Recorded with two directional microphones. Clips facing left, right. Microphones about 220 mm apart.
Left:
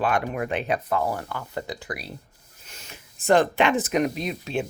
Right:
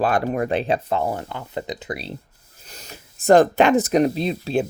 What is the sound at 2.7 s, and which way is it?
Speech, 40° right (ahead or behind).